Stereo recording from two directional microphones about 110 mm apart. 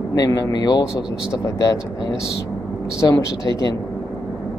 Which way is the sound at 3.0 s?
30° left (ahead or behind).